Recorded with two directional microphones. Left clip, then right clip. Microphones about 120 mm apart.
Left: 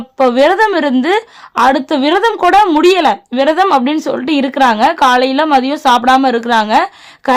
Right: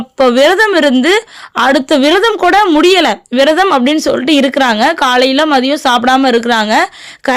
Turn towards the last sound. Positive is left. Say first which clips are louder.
# right 3 dB
turn(degrees=-20)  # may be behind; listen again after turning